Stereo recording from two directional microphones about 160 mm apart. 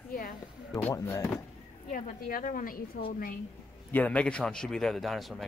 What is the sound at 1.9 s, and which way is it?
A woman's voice, 60° left (ahead or behind).